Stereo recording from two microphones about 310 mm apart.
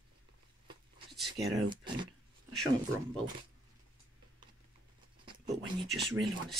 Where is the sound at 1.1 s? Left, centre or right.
Centre.